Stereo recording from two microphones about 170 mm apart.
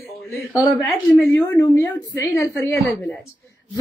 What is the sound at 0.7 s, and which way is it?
A woman's voice, 15° left (ahead or behind).